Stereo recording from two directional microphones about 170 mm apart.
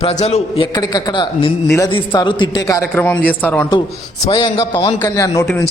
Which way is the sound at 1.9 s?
30° left (ahead or behind).